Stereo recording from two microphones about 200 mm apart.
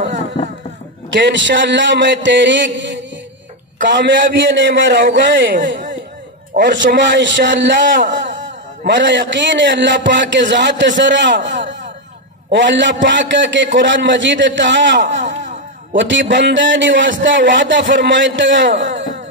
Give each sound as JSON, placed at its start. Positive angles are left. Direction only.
{"t": 1.1, "sound": "a man's voice", "side_deg": -65}
{"t": 6.5, "sound": "a man's voice", "side_deg": -60}
{"t": 7.8, "sound": "speech", "side_deg": -40}
{"t": 8.1, "sound": "a sound", "side_deg": -65}
{"t": 8.8, "sound": "a man's voice", "side_deg": -60}
{"t": 15.2, "sound": "a sound", "side_deg": -40}
{"t": 16.0, "sound": "a man's voice", "side_deg": -65}